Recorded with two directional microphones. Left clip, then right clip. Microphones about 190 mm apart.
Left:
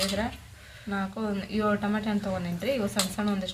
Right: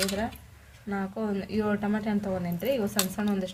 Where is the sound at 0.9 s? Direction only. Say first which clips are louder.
Even; 35° right (ahead or behind).